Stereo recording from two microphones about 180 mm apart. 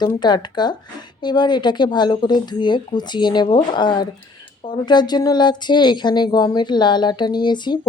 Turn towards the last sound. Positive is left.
turn(degrees=25)  # may be behind; listen again after turning